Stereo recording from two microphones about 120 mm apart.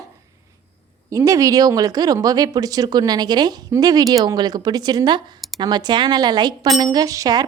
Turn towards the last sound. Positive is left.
turn(degrees=-30)  # may be behind; listen again after turning